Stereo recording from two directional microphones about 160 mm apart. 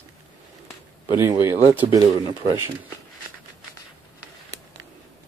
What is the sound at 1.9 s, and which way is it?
Speech, 25° right (ahead or behind).